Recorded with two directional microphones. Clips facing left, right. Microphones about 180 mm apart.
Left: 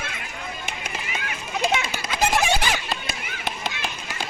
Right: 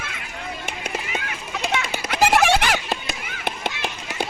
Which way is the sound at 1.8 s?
70° right (ahead or behind).